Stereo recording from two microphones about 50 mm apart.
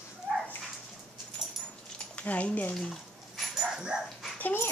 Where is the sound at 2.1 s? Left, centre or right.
Left.